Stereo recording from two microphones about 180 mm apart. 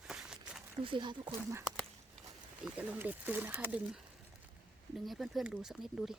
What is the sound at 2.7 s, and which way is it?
Speech, 10° right (ahead or behind).